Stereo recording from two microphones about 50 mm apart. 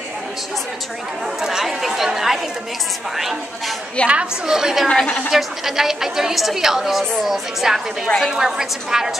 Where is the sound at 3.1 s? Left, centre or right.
Centre.